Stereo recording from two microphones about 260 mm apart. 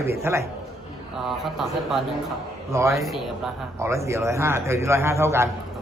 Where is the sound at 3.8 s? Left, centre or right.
Centre.